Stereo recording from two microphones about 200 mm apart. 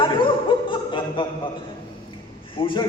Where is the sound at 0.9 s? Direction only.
25° left (ahead or behind).